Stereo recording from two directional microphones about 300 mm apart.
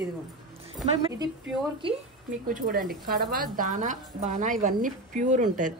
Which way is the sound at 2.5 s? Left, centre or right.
Right.